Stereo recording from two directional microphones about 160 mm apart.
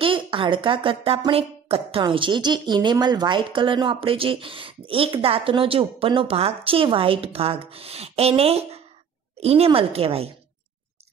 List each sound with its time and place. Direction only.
0.0 s speech: 35° right (ahead or behind)